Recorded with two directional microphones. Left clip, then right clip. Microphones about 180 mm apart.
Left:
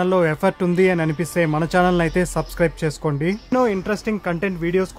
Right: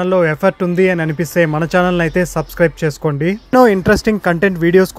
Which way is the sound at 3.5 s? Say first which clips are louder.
Right 10 dB; 30° right (ahead or behind).